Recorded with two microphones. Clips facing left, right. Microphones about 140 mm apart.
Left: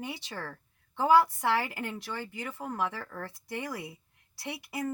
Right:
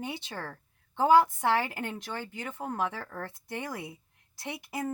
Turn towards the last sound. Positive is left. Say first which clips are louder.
# right 1 dB
turn(degrees=-20)  # may be behind; listen again after turning